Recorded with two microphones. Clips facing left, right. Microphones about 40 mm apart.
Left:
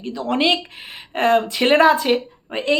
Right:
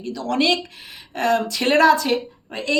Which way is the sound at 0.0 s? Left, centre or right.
Left.